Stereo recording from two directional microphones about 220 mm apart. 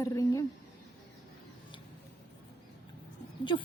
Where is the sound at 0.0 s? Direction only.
15° left (ahead or behind).